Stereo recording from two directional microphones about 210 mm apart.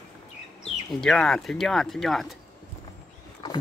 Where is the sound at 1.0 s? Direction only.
Centre (ahead or behind).